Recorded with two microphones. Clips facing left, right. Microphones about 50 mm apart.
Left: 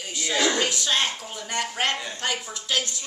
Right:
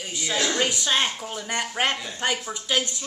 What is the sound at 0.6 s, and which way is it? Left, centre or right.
A woman's voice, centre.